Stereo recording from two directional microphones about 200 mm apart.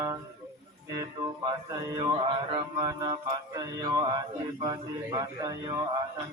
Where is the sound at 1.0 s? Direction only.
20° right (ahead or behind).